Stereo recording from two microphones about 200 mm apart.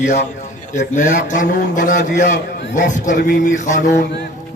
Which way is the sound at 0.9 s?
40° left (ahead or behind).